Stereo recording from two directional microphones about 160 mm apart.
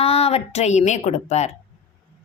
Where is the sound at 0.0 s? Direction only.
40° left (ahead or behind).